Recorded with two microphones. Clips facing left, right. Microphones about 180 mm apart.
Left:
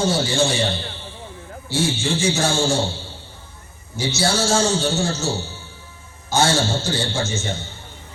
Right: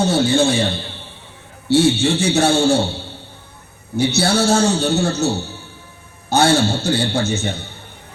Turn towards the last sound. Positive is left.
turn(degrees=-65)  # may be behind; listen again after turning